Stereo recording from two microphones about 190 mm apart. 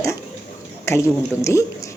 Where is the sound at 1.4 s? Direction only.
15° left (ahead or behind).